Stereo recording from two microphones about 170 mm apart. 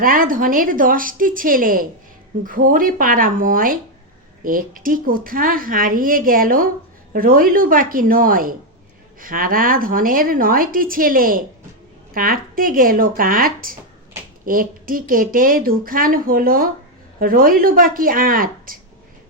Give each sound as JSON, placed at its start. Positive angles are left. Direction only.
{"t": 0.0, "sound": "speech", "side_deg": -55}